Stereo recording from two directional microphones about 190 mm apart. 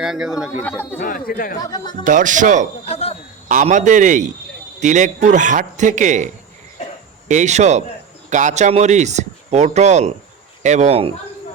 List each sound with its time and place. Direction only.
0.0 s a man's voice: 5° right (ahead or behind)
0.6 s speech: 10° left (ahead or behind)
0.9 s speech: 45° left (ahead or behind)
1.6 s speech: 20° left (ahead or behind)
2.0 s speech: 45° right (ahead or behind)
2.8 s a sound: 30° left (ahead or behind)
3.5 s a man's voice: 40° right (ahead or behind)